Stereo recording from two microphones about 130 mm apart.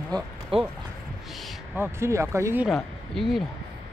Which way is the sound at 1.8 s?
20° right (ahead or behind).